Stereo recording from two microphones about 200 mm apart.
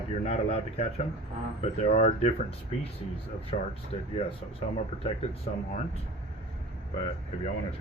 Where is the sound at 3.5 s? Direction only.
35° left (ahead or behind).